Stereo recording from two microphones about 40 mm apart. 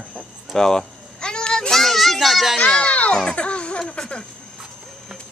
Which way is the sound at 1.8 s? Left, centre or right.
Centre.